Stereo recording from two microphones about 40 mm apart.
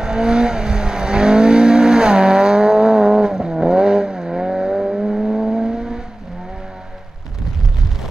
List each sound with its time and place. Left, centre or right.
0.0 s vehicle: centre